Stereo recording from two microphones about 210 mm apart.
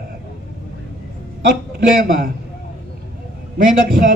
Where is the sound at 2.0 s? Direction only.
45° right (ahead or behind).